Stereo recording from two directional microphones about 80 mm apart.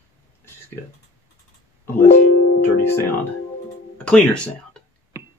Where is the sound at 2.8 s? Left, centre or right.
Left.